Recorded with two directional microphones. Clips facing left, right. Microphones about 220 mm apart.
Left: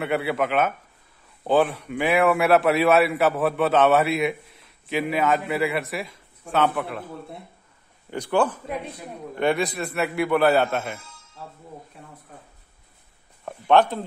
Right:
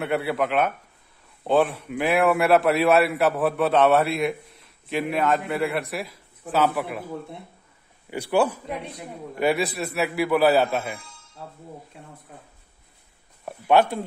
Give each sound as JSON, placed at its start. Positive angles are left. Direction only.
{"t": 0.0, "sound": "a man's voice", "side_deg": 0}
{"t": 8.1, "sound": "a man's voice", "side_deg": -10}
{"t": 13.5, "sound": "a man's voice", "side_deg": -10}